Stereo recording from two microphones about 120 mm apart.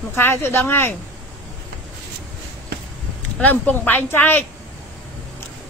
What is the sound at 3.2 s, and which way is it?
Speech, 10° left (ahead or behind).